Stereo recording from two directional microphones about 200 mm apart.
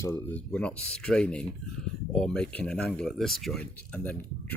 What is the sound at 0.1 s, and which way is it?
Speech, 10° left (ahead or behind).